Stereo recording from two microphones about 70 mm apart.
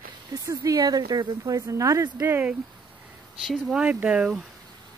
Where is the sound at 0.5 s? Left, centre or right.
Right.